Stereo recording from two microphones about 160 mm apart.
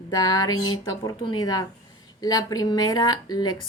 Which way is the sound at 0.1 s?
25° left (ahead or behind).